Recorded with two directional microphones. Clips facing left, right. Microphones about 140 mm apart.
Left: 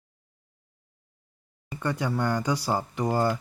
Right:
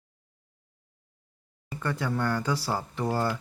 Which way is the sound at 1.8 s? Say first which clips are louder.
Left 2 dB; 15° left (ahead or behind).